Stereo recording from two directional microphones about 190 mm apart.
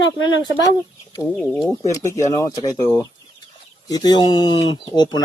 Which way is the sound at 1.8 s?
15° left (ahead or behind).